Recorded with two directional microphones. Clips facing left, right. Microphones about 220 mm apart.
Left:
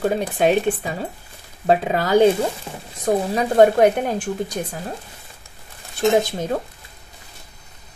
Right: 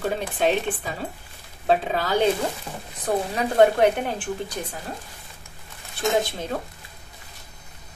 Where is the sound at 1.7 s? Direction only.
45° left (ahead or behind).